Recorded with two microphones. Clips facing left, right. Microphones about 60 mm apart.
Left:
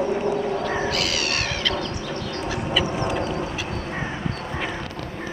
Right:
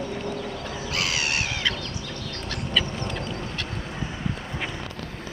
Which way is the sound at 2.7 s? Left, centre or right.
Centre.